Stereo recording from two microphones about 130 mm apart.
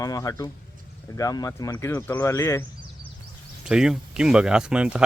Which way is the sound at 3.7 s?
5° right (ahead or behind).